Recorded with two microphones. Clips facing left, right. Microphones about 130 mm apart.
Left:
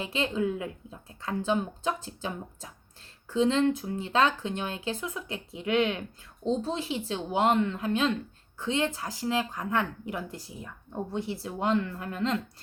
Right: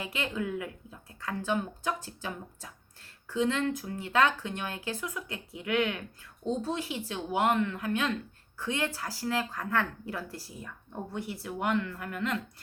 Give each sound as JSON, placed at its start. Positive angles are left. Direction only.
{"t": 0.0, "sound": "speech", "side_deg": 25}